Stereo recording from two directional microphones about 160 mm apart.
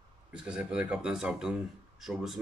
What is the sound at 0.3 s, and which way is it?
Speech, 5° right (ahead or behind).